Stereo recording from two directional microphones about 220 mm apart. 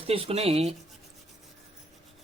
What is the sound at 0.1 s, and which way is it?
Speech, 25° right (ahead or behind).